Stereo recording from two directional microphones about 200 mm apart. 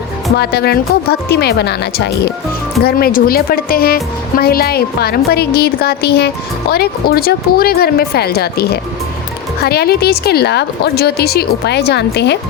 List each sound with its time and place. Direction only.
0.3 s a woman's voice: 50° left (ahead or behind)